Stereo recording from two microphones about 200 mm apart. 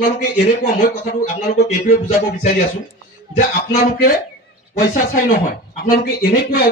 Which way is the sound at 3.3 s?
45° left (ahead or behind).